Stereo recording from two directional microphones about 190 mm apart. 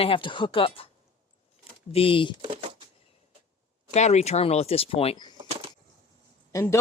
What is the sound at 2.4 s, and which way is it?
Speech, 25° right (ahead or behind).